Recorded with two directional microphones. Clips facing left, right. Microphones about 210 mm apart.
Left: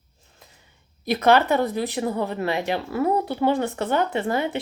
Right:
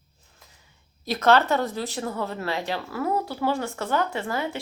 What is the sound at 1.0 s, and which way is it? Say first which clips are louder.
Speech: left 2 dB; 15° left (ahead or behind).